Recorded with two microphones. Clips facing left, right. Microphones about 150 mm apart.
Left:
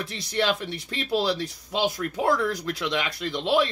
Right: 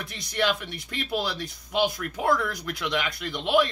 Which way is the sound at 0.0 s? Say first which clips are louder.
Left 1 dB; 25° left (ahead or behind).